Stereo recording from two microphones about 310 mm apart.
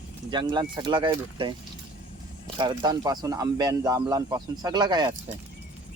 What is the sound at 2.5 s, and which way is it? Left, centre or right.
Speech, centre.